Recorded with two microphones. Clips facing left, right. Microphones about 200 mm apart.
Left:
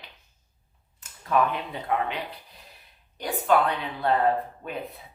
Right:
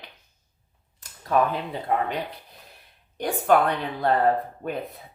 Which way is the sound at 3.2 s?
50° right (ahead or behind).